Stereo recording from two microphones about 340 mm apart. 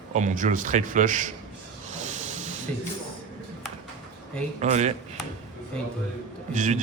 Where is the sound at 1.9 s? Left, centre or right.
Right.